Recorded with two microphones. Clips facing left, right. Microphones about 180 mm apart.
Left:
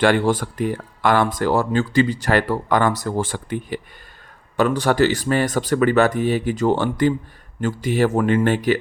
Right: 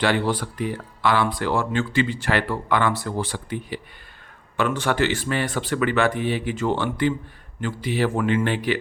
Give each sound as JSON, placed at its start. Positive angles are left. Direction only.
{"t": 0.0, "sound": "speech", "side_deg": 50}
{"t": 4.5, "sound": "speech", "side_deg": 40}